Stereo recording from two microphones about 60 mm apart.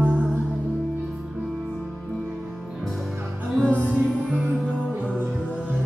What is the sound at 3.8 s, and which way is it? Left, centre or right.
Music, centre.